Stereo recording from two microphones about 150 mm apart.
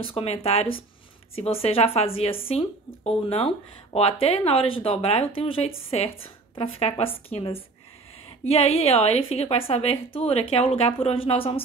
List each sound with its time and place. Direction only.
0.0 s a woman's voice: 40° left (ahead or behind)